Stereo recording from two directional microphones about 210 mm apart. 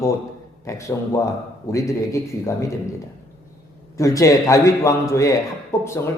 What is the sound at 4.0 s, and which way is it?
A man's voice, 15° left (ahead or behind).